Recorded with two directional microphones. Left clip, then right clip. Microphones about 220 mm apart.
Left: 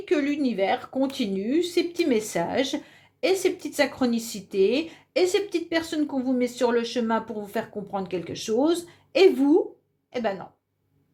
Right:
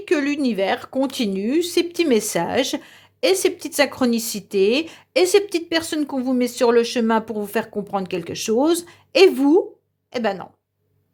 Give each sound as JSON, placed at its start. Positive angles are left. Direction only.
{"t": 0.0, "sound": "speech", "side_deg": -40}